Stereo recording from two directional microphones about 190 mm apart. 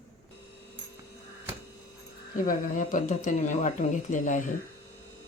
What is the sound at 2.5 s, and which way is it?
Speech, 45° left (ahead or behind).